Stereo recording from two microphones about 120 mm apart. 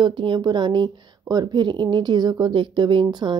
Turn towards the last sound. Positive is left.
turn(degrees=-40)  # may be behind; listen again after turning